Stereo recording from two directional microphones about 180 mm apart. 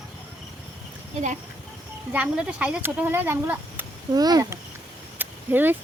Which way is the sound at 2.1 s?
10° right (ahead or behind).